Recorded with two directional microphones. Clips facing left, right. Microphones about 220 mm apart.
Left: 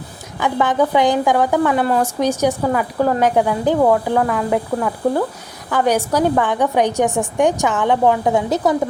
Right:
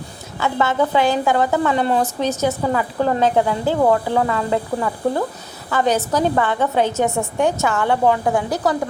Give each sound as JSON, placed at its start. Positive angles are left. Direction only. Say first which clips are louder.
{"t": 0.3, "sound": "a woman's voice", "louder": "left 2 dB", "side_deg": 15}
{"t": 3.8, "sound": "a woman's voice", "louder": "left 1 dB", "side_deg": 5}